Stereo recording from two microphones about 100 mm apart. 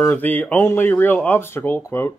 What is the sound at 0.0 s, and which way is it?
Speech, 20° left (ahead or behind).